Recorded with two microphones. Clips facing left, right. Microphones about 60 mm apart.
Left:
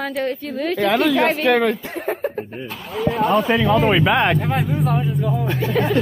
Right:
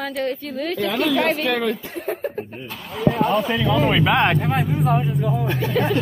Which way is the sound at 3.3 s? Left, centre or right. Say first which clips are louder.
Left 3 dB; left.